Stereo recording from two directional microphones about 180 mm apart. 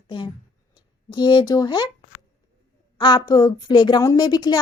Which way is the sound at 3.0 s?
25° left (ahead or behind).